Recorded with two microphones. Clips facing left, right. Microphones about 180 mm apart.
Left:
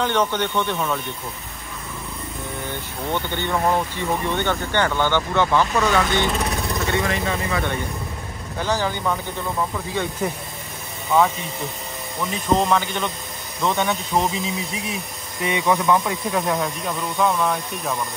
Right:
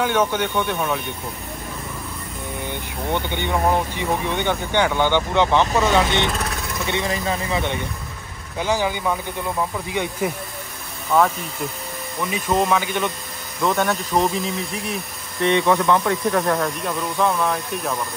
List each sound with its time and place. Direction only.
0.0 s speech: 10° right (ahead or behind)
3.1 s speech: 15° right (ahead or behind)
11.1 s speech: centre (ahead or behind)
15.4 s speech: 15° left (ahead or behind)